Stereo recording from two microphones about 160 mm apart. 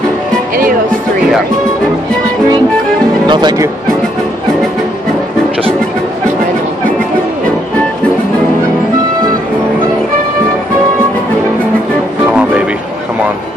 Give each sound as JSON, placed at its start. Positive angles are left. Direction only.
{"t": 3.3, "sound": "speech", "side_deg": -25}